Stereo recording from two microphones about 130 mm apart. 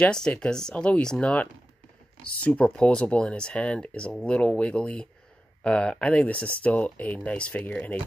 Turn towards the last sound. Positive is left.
turn(degrees=10)  # may be behind; listen again after turning